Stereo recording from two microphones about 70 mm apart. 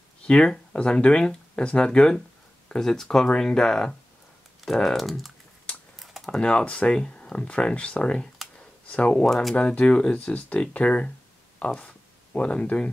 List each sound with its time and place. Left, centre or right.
0.3 s speech: centre
5.9 s typing: centre
6.4 s speech: centre
9.2 s speech: centre
9.6 s speech: centre